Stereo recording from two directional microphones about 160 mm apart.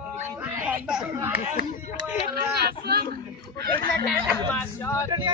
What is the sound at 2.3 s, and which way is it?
Speech, 75° right (ahead or behind).